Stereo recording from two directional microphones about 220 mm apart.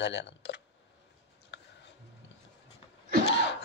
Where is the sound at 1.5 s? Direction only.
50° left (ahead or behind).